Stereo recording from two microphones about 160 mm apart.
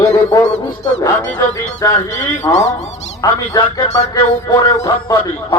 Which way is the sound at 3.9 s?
45° left (ahead or behind).